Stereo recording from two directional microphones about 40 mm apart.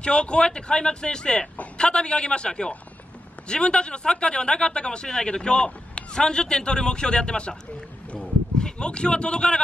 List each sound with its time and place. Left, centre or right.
0.0 s speech: left
8.5 s speech: left